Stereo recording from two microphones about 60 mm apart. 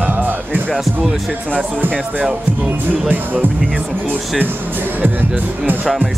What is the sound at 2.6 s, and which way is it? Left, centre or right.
Speech, right.